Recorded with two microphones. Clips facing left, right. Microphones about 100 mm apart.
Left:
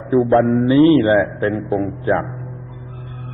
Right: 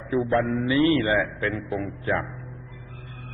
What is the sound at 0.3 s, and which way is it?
A man's voice, 40° left (ahead or behind).